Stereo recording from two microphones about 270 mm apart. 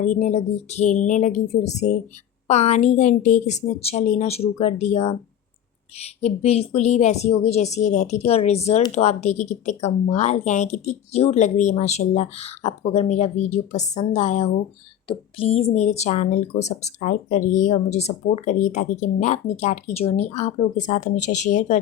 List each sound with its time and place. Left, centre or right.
0.0 s a woman's voice: left